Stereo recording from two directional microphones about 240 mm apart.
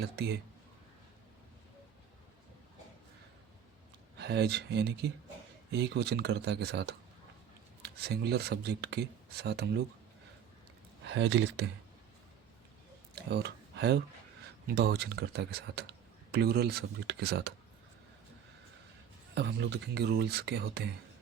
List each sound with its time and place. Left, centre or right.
0.0 s speech: right
4.2 s speech: right
11.0 s speech: right
13.3 s speech: right
19.3 s speech: right